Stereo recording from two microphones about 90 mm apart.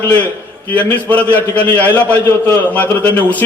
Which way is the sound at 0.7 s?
15° left (ahead or behind).